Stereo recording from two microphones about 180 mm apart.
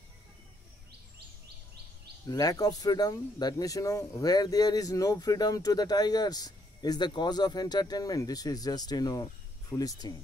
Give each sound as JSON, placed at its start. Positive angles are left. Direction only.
{"t": 2.2, "sound": "speech", "side_deg": 20}